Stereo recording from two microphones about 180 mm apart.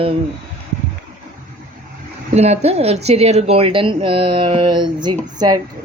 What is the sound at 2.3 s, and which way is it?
A woman's voice, 35° right (ahead or behind).